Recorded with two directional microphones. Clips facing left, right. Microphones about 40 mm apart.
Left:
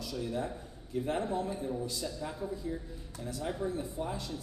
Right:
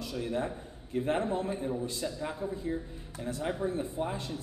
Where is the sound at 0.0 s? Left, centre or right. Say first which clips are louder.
Right 2 dB; right.